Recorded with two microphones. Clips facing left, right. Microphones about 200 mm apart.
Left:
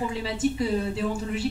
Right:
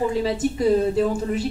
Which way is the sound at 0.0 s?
40° right (ahead or behind).